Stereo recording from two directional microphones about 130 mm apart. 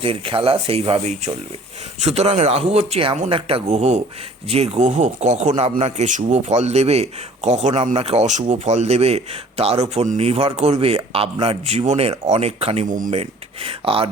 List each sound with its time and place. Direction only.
0.0 s speech: 45° right (ahead or behind)